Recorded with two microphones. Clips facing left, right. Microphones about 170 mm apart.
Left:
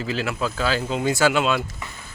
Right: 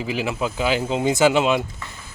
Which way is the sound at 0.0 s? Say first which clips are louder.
Right 1 dB; 15° right (ahead or behind).